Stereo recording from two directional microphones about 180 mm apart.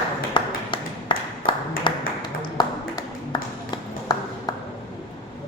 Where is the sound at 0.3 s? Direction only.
25° left (ahead or behind).